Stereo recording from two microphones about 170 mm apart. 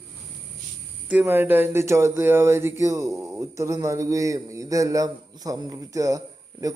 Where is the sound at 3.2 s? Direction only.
20° right (ahead or behind).